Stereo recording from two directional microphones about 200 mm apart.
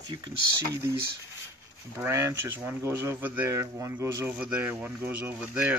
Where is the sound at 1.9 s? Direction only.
10° right (ahead or behind).